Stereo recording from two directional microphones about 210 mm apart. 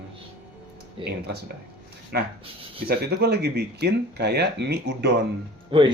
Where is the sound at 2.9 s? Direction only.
50° right (ahead or behind).